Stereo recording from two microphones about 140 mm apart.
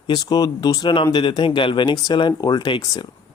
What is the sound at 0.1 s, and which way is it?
Speech, 25° left (ahead or behind).